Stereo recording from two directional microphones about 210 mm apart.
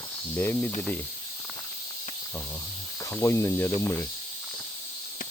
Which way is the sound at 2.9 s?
15° left (ahead or behind).